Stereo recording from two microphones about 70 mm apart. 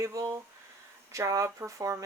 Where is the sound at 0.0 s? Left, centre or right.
Right.